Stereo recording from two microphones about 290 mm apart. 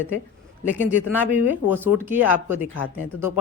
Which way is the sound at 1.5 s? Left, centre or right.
Centre.